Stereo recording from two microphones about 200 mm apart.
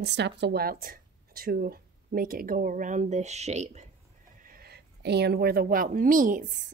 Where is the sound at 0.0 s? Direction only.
60° right (ahead or behind); by 3.8 s 35° right (ahead or behind).